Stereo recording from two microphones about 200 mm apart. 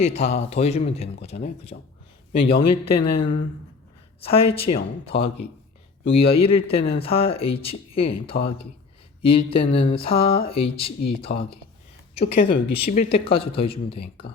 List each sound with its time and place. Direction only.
0.0 s speech: 30° left (ahead or behind)
12.8 s speech: 35° left (ahead or behind)